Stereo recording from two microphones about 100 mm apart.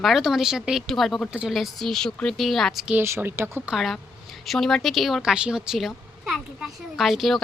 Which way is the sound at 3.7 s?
Centre (ahead or behind).